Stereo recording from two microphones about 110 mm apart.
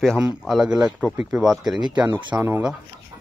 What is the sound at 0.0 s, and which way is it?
Speech, centre (ahead or behind).